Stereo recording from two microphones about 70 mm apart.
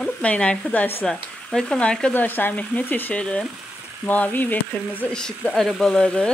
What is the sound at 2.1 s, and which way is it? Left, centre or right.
A woman's voice, left.